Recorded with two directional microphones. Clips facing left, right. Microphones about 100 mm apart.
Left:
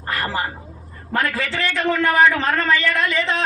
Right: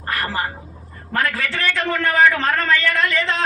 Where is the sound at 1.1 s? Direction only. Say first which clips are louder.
Even; 20° left (ahead or behind).